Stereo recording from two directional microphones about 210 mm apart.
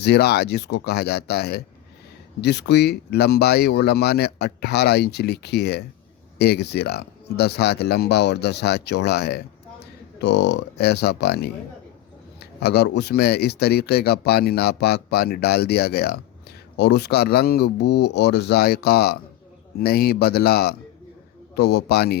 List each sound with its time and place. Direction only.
0.0 s speech: 50° left (ahead or behind)